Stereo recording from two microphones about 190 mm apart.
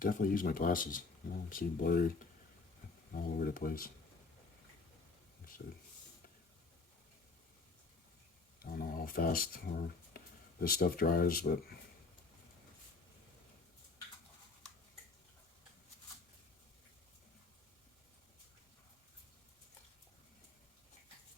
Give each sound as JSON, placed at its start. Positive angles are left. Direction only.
{"t": 0.0, "sound": "speech", "side_deg": 45}
{"t": 8.5, "sound": "speech", "side_deg": 55}
{"t": 10.1, "sound": "a sound", "side_deg": 50}
{"t": 10.6, "sound": "speech", "side_deg": 50}